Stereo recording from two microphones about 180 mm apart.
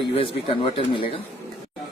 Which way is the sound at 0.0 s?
30° left (ahead or behind).